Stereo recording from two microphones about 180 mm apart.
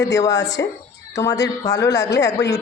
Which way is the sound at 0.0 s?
20° left (ahead or behind).